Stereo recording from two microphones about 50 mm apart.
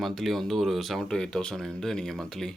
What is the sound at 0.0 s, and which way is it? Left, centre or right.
Speech, centre.